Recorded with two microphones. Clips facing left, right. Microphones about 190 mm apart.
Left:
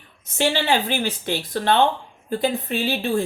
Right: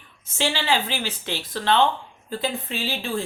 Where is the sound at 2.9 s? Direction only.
60° left (ahead or behind).